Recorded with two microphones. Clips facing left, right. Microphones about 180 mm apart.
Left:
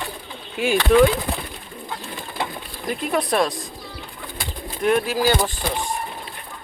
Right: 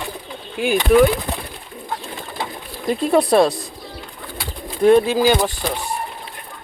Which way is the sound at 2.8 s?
30° right (ahead or behind).